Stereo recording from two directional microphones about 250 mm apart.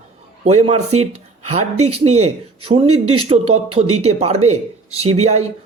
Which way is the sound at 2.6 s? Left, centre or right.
Centre.